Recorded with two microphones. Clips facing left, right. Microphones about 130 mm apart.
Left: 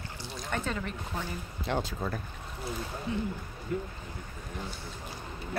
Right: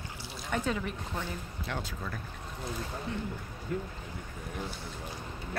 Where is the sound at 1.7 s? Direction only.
25° left (ahead or behind).